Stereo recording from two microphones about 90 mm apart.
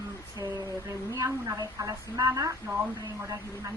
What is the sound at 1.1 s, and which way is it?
A woman's voice, 45° right (ahead or behind).